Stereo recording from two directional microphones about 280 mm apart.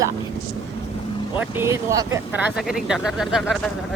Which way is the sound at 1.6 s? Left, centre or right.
Centre.